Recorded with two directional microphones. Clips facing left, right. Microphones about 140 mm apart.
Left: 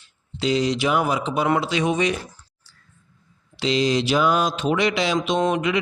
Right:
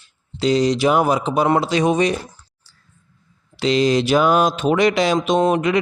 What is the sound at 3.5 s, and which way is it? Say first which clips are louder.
Speech: right 4 dB; 50° right (ahead or behind).